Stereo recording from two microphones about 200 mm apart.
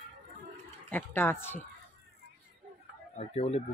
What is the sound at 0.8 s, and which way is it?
Speech, 10° left (ahead or behind).